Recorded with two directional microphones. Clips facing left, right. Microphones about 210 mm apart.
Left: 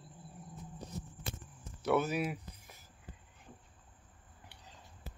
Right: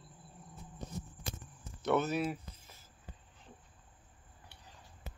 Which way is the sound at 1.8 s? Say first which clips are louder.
Even; 10° left (ahead or behind).